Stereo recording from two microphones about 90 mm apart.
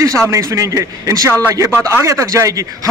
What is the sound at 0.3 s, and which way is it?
A man's voice, 35° right (ahead or behind).